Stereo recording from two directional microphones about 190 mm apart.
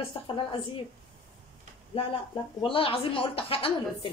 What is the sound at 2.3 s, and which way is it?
A woman's voice, 25° left (ahead or behind).